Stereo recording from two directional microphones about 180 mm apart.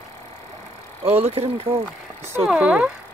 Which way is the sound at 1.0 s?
35° right (ahead or behind).